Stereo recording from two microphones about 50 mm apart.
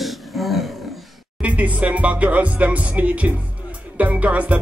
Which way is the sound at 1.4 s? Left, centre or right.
Right.